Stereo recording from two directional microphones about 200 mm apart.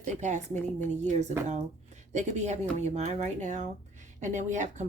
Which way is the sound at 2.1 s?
35° right (ahead or behind).